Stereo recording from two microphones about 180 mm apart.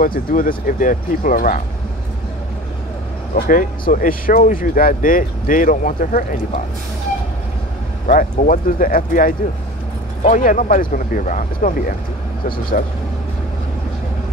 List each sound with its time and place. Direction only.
0.0 s speech: 50° left (ahead or behind)
3.3 s speech: 50° left (ahead or behind)
8.1 s speech: 50° left (ahead or behind)